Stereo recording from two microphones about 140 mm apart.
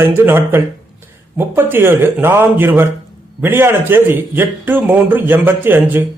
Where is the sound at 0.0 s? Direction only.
15° right (ahead or behind).